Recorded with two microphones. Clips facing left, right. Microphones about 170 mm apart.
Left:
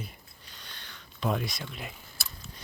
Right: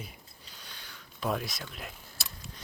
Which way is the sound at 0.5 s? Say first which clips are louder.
Left 1 dB; 5° right (ahead or behind).